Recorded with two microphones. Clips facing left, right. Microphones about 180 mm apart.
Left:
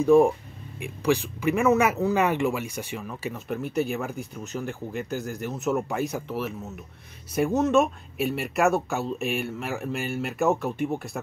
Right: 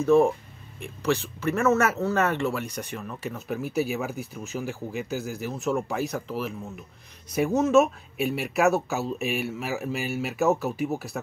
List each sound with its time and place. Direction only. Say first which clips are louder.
0.0 s speech: left 2 dB; 15° left (ahead or behind); by 11.1 s 5° right (ahead or behind)